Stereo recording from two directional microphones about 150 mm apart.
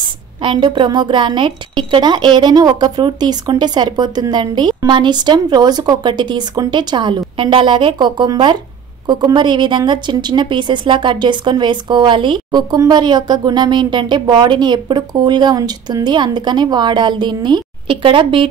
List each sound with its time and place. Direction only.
0.4 s a woman's voice: 35° right (ahead or behind)